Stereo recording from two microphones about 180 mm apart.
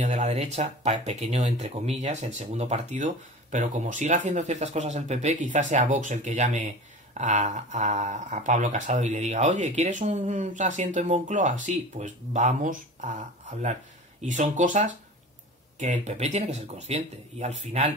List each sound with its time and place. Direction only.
0.0 s speech: 40° right (ahead or behind)
14.2 s speech: 45° right (ahead or behind)